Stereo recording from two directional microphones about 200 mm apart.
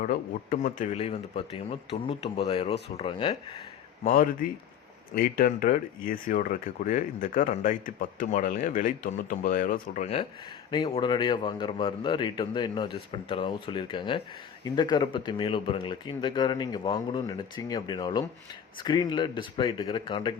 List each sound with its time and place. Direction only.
0.0 s speech: 45° left (ahead or behind); by 3.3 s 25° left (ahead or behind)
4.0 s a man's voice: 45° left (ahead or behind)
10.7 s speech: 20° left (ahead or behind)